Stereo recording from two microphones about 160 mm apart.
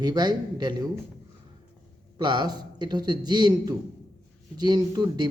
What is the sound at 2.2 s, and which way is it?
A man's voice, 25° right (ahead or behind).